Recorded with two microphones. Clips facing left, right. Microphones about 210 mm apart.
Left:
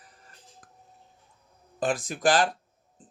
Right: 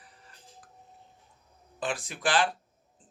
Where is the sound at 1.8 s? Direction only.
45° left (ahead or behind).